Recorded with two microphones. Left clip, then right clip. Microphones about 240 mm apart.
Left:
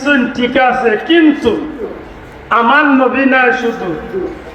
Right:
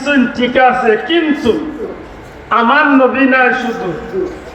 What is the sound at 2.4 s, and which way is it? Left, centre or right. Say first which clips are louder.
A man's voice: left 1 dB; left.